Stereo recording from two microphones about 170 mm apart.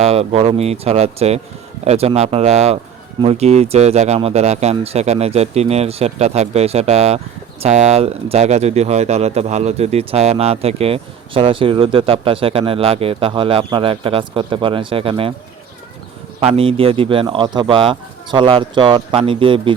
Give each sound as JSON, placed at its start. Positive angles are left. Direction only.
{"t": 0.0, "sound": "speech", "side_deg": -35}
{"t": 16.4, "sound": "speech", "side_deg": -35}